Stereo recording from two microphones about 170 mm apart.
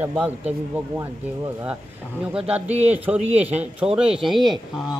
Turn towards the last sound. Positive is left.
turn(degrees=0)  # may be behind; listen again after turning